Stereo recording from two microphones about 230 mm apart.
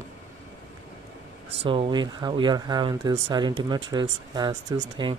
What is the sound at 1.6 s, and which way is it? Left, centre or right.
Speech, right.